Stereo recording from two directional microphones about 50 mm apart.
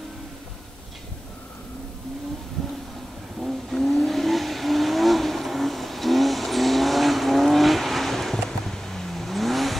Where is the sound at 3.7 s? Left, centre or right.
Centre.